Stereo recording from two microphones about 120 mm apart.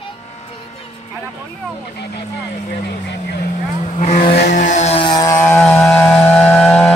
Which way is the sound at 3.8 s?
75° left (ahead or behind).